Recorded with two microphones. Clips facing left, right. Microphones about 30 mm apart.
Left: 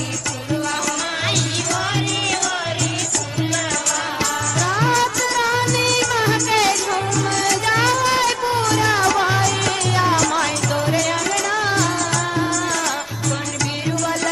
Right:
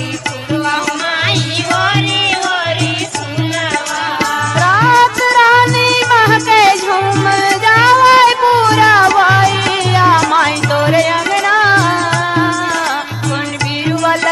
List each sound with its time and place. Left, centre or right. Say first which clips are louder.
1.7 s music: right 11 dB; right
4.2 s music: right 11 dB; right
13.8 s music: right 10 dB; right